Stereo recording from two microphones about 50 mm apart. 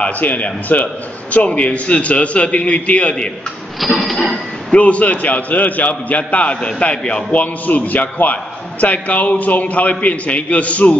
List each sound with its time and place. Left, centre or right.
0.0 s a man's voice: left
4.0 s a sound: centre
4.7 s a man's voice: left